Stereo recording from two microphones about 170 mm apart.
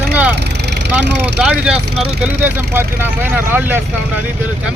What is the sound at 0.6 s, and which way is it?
Vehicle, 85° right.